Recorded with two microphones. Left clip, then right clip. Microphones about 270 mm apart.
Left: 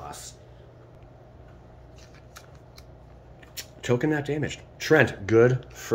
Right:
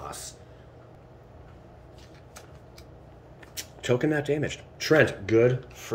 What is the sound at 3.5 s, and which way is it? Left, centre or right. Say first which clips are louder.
Speech: even; centre.